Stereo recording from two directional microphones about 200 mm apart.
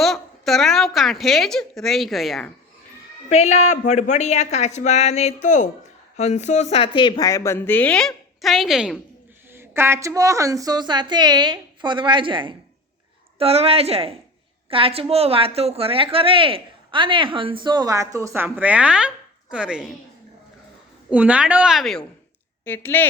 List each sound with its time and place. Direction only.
0.0 s a woman's voice: centre (ahead or behind)
3.2 s speech: 35° left (ahead or behind); by 9.0 s centre (ahead or behind)
9.5 s a woman's voice: 10° right (ahead or behind)
21.1 s a woman's voice: 5° right (ahead or behind)
22.6 s speech: 10° left (ahead or behind)